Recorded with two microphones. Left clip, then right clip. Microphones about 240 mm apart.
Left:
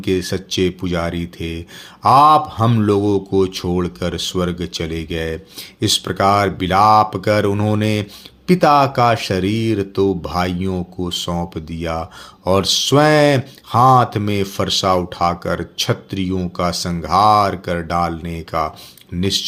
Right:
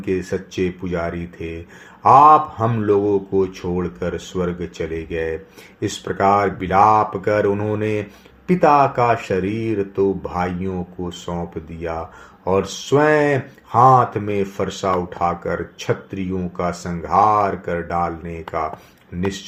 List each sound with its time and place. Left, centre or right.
0.0 s speech: left